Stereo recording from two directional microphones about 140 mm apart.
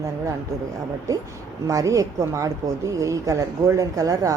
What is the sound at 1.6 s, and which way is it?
A woman's voice, 25° right (ahead or behind).